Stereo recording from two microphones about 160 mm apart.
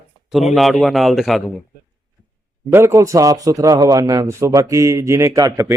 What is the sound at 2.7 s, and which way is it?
A man's voice, 15° right (ahead or behind).